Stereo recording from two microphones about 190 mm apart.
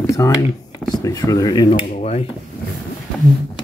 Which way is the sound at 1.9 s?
35° left (ahead or behind).